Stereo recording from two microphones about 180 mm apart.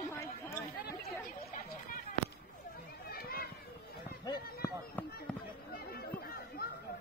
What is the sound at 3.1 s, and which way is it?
Run, 55° left (ahead or behind).